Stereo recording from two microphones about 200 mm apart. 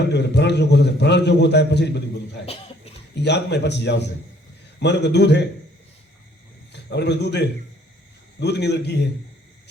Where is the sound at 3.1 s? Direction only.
55° left (ahead or behind).